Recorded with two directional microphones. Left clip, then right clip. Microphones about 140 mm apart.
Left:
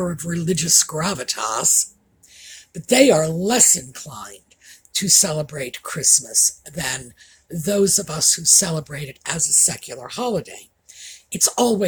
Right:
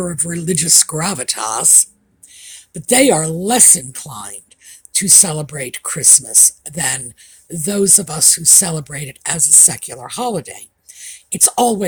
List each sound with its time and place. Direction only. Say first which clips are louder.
0.0 s speech: right 3 dB; 45° right (ahead or behind)